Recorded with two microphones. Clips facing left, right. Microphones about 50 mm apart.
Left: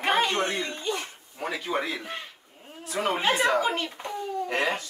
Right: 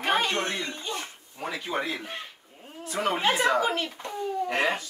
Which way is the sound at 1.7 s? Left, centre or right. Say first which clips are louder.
Left 1 dB; centre.